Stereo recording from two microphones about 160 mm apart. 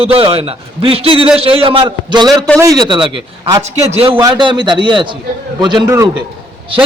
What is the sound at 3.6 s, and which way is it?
Speech, 40° right (ahead or behind).